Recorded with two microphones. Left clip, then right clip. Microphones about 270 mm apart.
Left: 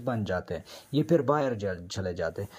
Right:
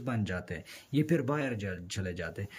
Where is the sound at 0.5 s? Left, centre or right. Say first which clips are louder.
Left 5 dB; centre.